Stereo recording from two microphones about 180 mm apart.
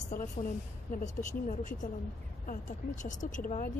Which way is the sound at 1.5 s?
45° left (ahead or behind).